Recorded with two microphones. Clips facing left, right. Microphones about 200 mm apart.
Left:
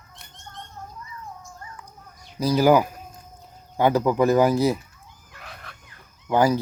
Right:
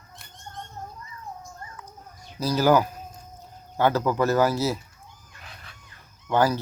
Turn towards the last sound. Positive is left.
turn(degrees=10)  # may be behind; listen again after turning